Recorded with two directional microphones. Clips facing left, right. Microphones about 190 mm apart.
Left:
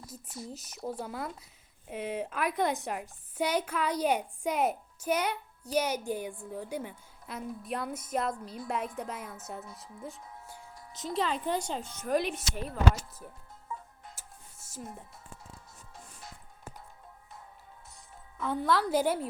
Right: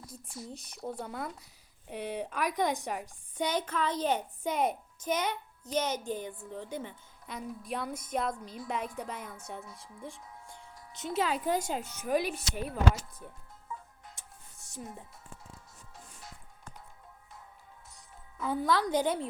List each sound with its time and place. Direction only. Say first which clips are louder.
0.5 s a woman's voice: left 2 dB; 5° left (ahead or behind)
10.4 s music: left 2 dB; 5° left (ahead or behind)
10.8 s music: left 2 dB; 30° left (ahead or behind)
11.0 s a woman's voice: right 1 dB; centre (ahead or behind)
14.2 s music: left 2 dB; centre (ahead or behind)
18.3 s a woman's voice: even; 5° right (ahead or behind)